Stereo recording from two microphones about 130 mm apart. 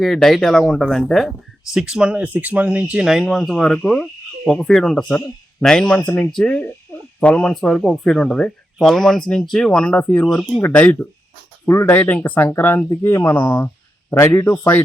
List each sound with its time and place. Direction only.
0.0 s a man's voice: 5° left (ahead or behind)